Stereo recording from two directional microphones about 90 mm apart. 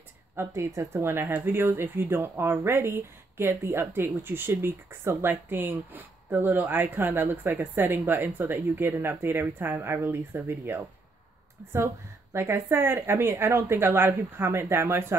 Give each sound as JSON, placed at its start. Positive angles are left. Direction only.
{"t": 0.4, "sound": "speech", "side_deg": -35}